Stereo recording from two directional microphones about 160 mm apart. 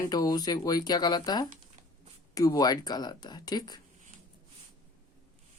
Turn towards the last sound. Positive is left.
turn(degrees=25)  # may be behind; listen again after turning